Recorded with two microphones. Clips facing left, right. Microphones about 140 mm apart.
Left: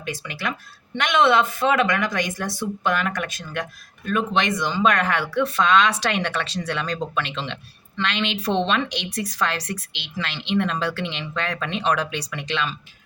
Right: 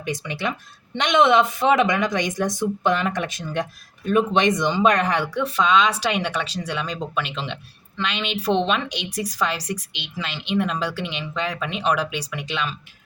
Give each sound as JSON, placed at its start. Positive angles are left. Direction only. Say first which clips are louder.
{"t": 0.0, "sound": "speech", "louder": "right 3 dB", "side_deg": -20}